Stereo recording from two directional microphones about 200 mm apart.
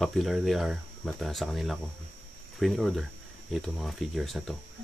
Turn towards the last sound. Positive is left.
turn(degrees=0)  # may be behind; listen again after turning